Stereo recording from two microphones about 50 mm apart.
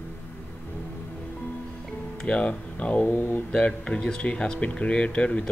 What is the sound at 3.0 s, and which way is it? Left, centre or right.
Speech, left.